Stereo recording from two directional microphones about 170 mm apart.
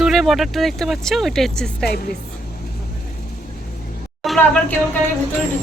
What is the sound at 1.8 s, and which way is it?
Speech, 65° left (ahead or behind).